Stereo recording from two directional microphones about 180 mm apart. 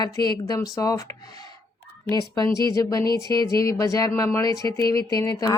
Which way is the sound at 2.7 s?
20° left (ahead or behind).